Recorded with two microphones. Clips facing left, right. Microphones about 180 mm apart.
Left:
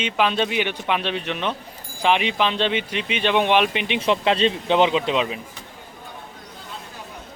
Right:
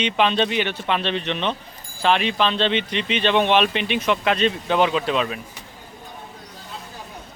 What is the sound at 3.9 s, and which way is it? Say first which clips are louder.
Speech: left 2 dB; 30° left (ahead or behind).